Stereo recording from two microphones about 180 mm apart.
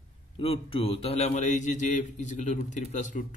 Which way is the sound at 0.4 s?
30° left (ahead or behind).